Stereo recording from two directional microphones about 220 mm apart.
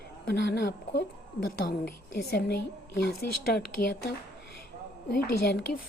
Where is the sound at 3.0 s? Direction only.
45° left (ahead or behind).